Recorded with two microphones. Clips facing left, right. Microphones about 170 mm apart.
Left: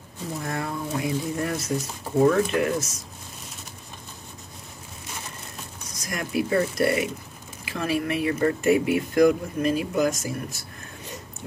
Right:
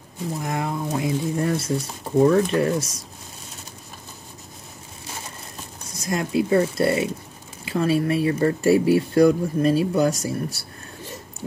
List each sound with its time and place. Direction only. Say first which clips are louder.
0.4 s speech: right 3 dB; 20° right (ahead or behind)
5.9 s speech: right 7 dB; 25° right (ahead or behind)